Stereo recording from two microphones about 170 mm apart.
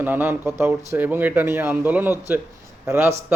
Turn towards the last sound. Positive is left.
turn(degrees=-10)  # may be behind; listen again after turning